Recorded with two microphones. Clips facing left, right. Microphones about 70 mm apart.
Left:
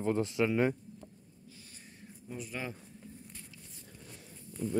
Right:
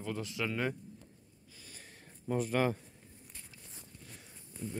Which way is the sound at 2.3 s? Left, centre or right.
Right.